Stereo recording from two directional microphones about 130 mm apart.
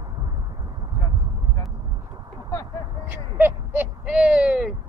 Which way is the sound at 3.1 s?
15° right (ahead or behind).